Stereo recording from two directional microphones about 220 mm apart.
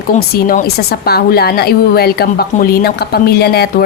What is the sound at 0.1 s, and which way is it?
A woman's voice, 35° left (ahead or behind).